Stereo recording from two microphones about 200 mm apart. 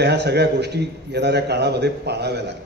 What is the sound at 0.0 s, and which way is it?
A man's voice, 55° right (ahead or behind).